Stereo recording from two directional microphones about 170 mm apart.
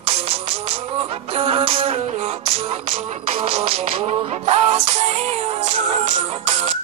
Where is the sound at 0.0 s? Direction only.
35° right (ahead or behind).